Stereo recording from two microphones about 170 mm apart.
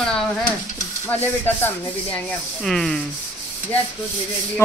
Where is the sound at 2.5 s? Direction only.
Centre (ahead or behind).